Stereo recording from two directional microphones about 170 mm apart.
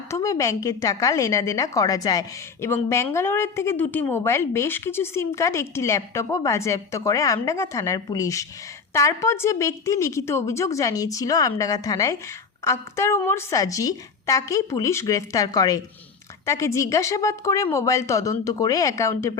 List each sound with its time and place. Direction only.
0.1 s a woman's voice: 20° left (ahead or behind)